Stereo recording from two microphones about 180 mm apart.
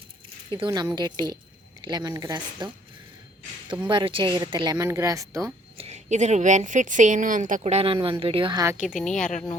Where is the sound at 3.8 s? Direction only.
25° right (ahead or behind).